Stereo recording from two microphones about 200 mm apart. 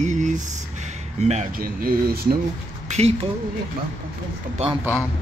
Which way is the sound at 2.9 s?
30° right (ahead or behind).